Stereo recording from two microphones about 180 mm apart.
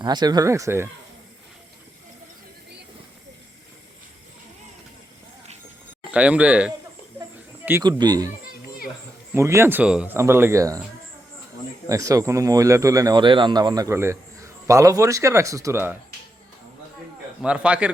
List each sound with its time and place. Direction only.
0.0 s speech: 25° right (ahead or behind)
6.1 s speech: 5° right (ahead or behind)
7.2 s a sound: 15° right (ahead or behind)
7.9 s speech: 25° right (ahead or behind)
9.3 s speech: 15° right (ahead or behind)
11.9 s speech: 20° right (ahead or behind)
17.4 s speech: 5° right (ahead or behind)